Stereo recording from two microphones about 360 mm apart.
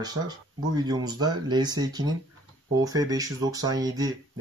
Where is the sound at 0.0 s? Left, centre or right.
Centre.